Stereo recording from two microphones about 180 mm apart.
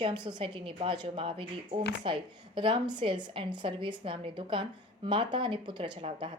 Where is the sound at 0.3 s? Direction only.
25° right (ahead or behind).